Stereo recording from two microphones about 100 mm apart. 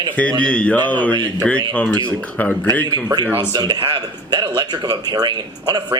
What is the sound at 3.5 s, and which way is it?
Speech, 45° right (ahead or behind).